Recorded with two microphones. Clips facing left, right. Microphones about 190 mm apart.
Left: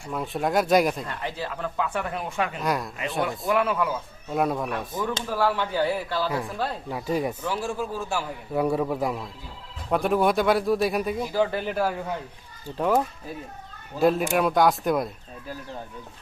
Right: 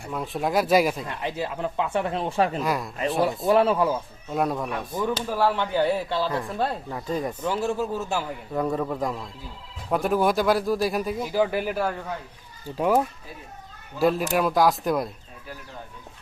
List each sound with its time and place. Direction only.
0.1 s speech: centre (ahead or behind)
1.0 s speech: 20° right (ahead or behind); by 2.6 s 35° right (ahead or behind)
2.6 s speech: centre (ahead or behind)
3.5 s speech: 30° right (ahead or behind)
4.3 s speech: centre (ahead or behind)
5.3 s speech: 15° right (ahead or behind)
6.2 s speech: 5° left (ahead or behind)
7.4 s speech: 25° right (ahead or behind)
8.5 s speech: 10° left (ahead or behind)
11.3 s speech: 15° right (ahead or behind)
11.7 s speech: 5° left (ahead or behind)
12.7 s speech: 10° right (ahead or behind)
14.0 s speech: centre (ahead or behind)